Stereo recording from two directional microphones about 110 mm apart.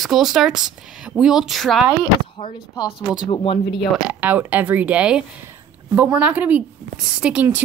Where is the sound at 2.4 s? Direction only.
50° left (ahead or behind).